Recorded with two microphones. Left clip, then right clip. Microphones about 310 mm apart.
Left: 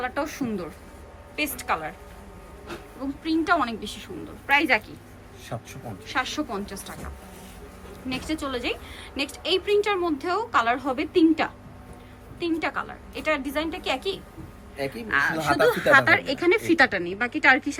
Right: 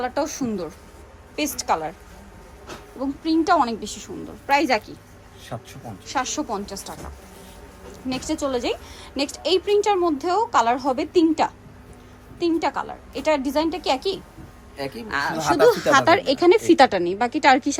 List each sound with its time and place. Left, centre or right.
0.0 s a woman's voice: centre
3.0 s a woman's voice: centre
5.5 s speech: centre
6.1 s a woman's voice: centre
8.1 s a woman's voice: centre
15.4 s speech: centre
15.6 s a woman's voice: centre